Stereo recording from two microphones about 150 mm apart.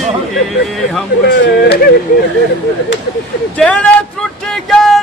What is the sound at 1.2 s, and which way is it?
Speech, 90° left.